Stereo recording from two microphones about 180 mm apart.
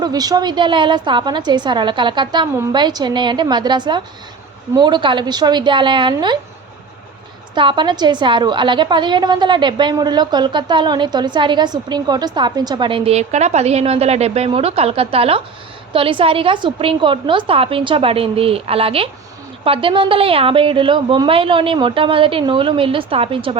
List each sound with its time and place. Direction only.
0.0 s a woman's voice: 20° right (ahead or behind)
7.5 s a woman's voice: 25° right (ahead or behind)